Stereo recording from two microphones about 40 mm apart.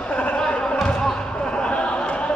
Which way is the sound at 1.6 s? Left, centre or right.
Left.